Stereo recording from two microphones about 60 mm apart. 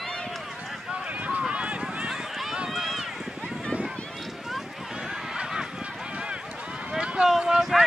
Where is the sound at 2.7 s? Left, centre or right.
Centre.